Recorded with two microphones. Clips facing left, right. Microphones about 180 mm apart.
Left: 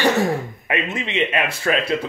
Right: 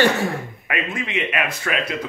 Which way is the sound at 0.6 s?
25° left (ahead or behind).